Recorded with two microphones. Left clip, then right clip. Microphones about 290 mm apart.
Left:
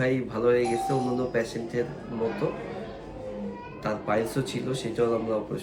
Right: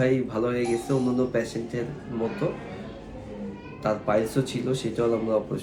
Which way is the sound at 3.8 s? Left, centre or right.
Centre.